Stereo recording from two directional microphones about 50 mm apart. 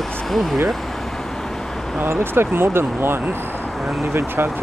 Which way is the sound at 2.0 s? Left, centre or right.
Right.